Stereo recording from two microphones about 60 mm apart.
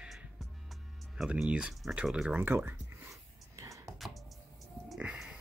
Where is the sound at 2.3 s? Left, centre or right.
Right.